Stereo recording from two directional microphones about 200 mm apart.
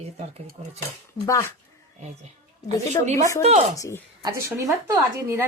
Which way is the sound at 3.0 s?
40° right (ahead or behind).